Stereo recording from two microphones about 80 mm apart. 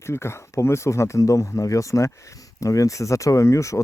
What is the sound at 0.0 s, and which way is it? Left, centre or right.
Speech, left.